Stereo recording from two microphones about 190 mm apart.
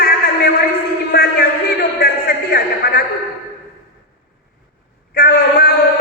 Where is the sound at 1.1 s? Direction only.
50° left (ahead or behind).